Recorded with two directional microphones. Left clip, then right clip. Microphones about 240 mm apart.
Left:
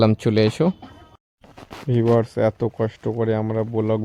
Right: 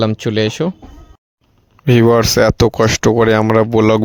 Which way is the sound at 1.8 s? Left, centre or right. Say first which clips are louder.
Right 9 dB; right.